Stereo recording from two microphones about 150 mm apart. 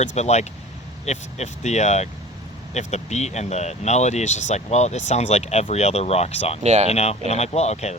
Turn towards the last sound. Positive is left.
turn(degrees=45)  # may be behind; listen again after turning